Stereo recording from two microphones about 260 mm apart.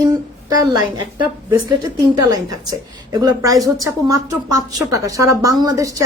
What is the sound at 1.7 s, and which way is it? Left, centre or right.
Speech, centre.